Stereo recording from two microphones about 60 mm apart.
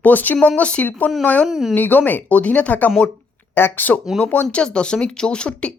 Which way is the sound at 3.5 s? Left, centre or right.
Left.